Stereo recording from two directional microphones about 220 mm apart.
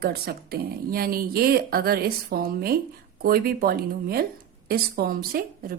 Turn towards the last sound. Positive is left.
turn(degrees=-40)  # may be behind; listen again after turning